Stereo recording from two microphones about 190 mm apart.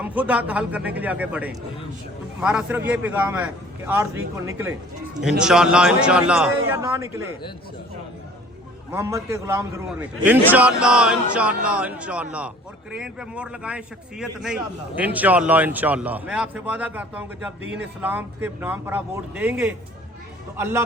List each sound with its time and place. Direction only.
0.0 s a man's voice: 10° right (ahead or behind)
5.4 s a man's voice: 5° right (ahead or behind)
6.7 s a man's voice: 15° right (ahead or behind)
8.9 s a man's voice: 15° right (ahead or behind)